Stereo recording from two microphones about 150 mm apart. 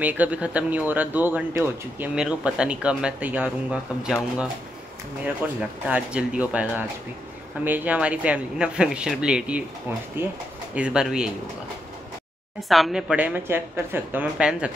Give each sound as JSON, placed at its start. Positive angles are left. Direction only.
{"t": 0.0, "sound": "speech", "side_deg": -10}
{"t": 10.2, "sound": "speech", "side_deg": -15}
{"t": 12.5, "sound": "speech", "side_deg": 0}